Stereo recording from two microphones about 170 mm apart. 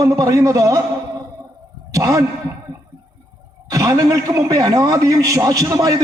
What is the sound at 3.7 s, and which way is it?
A man's voice, 20° right (ahead or behind).